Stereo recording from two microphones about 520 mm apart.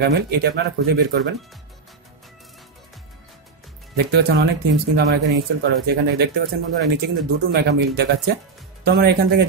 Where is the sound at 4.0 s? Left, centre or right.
Centre.